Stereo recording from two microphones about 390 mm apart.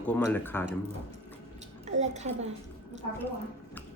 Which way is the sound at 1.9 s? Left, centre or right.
Centre.